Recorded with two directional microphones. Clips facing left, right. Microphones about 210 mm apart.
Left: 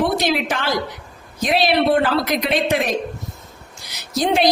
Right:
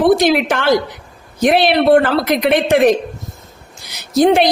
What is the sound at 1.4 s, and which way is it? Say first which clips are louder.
Speech: right 5 dB; 70° right (ahead or behind).